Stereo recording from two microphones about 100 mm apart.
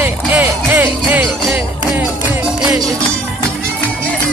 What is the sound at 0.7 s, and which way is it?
Music, 15° right (ahead or behind).